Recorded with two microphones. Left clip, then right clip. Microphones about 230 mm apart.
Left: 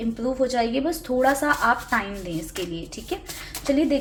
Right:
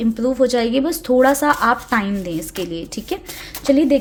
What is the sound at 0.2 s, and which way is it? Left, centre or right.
A woman's voice, right.